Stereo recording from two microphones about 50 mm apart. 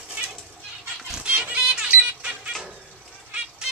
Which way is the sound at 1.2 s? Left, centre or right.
Right.